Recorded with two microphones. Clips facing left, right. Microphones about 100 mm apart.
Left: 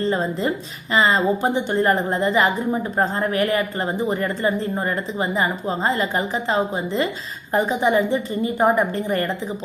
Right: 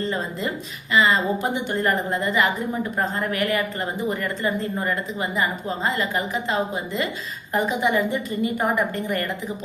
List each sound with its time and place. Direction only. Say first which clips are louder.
0.0 s a woman's voice: left 5 dB; 35° left (ahead or behind)